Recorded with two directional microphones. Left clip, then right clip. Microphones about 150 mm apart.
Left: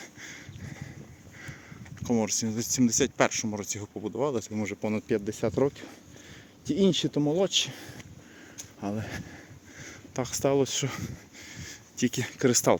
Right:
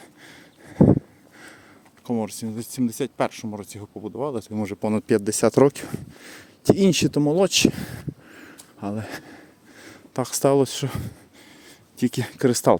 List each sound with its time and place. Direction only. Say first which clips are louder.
0.0 s a sound: left 2 dB; 20° right (ahead or behind)
2.0 s speech: even; 15° right (ahead or behind)
4.6 s speech: right 6 dB; 45° right (ahead or behind); by 7.2 s 70° right (ahead or behind)
7.2 s speech: right 8 dB; 55° right (ahead or behind)
8.8 s speech: right 4 dB; 30° right (ahead or behind)
9.8 s a sound: right 6 dB; 30° right (ahead or behind)
10.2 s speech: right 6 dB; 45° right (ahead or behind)